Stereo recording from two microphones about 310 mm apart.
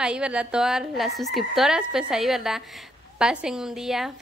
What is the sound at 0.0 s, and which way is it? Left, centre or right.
A woman's voice, centre.